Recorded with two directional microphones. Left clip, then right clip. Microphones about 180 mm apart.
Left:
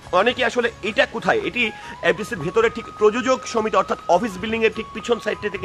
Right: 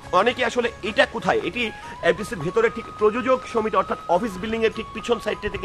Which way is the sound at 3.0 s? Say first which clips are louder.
Left 2 dB; 55° left (ahead or behind).